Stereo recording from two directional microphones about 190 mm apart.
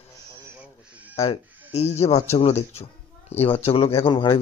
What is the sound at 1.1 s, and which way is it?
Speech, 30° left (ahead or behind).